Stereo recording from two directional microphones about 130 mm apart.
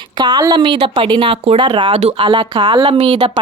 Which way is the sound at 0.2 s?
35° right (ahead or behind).